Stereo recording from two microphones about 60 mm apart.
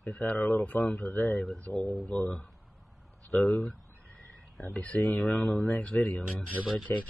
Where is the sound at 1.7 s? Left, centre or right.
Left.